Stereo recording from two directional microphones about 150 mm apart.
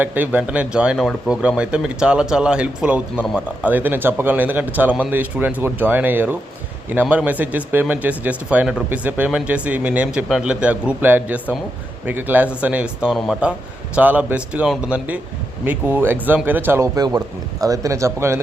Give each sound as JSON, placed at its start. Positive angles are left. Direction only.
{"t": 0.0, "sound": "speech", "side_deg": -10}